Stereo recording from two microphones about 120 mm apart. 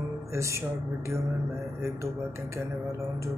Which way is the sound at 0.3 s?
25° right (ahead or behind).